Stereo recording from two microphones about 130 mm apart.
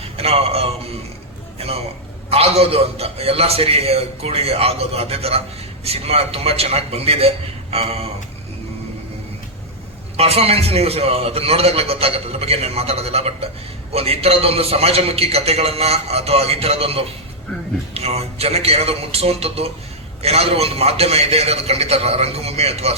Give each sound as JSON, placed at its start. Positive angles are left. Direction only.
{"t": 0.2, "sound": "a sound", "side_deg": -50}
{"t": 2.3, "sound": "a man's voice", "side_deg": -50}
{"t": 10.2, "sound": "a man's voice", "side_deg": -50}